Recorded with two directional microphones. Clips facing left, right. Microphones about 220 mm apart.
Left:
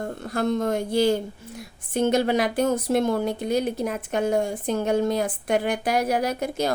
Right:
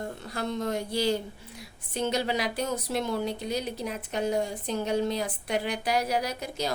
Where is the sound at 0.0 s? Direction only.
50° left (ahead or behind).